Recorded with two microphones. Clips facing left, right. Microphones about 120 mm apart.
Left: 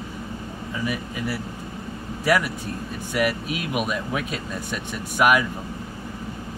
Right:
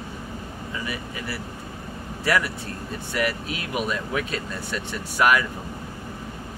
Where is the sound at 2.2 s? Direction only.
15° left (ahead or behind).